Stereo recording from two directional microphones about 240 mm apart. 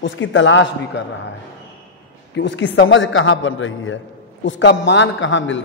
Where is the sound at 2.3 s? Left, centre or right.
Left.